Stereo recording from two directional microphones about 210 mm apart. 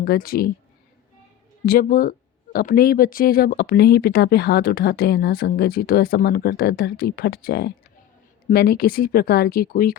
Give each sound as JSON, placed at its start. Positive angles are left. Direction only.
{"t": 0.0, "sound": "speech", "side_deg": 45}
{"t": 1.6, "sound": "speech", "side_deg": 45}